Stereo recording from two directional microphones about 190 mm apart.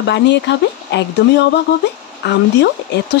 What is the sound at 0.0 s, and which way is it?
Speech, 65° left (ahead or behind).